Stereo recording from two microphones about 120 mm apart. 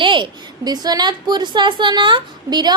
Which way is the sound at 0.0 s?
40° right (ahead or behind).